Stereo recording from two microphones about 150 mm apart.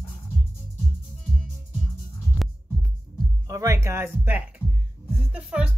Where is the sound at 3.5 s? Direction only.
20° right (ahead or behind).